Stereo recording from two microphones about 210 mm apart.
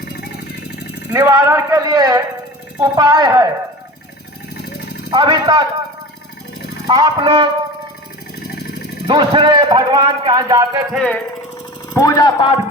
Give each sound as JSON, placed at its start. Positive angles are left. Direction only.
{"t": 1.1, "sound": "speech", "side_deg": -15}
{"t": 5.1, "sound": "a man's voice", "side_deg": -20}
{"t": 6.8, "sound": "a man's voice", "side_deg": -20}
{"t": 9.0, "sound": "a man's voice", "side_deg": -25}
{"t": 10.9, "sound": "music", "side_deg": 5}
{"t": 11.9, "sound": "speech", "side_deg": 15}